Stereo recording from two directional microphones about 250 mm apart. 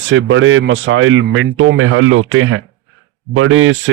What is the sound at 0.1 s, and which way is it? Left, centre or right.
Speech, right.